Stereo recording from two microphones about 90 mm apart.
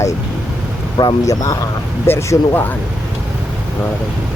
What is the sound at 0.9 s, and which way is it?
Speech, 45° left (ahead or behind).